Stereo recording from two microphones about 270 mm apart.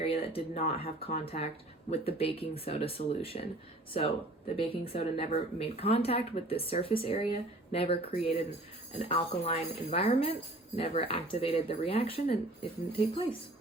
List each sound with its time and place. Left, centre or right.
0.0 s speech: left
4.5 s speech: left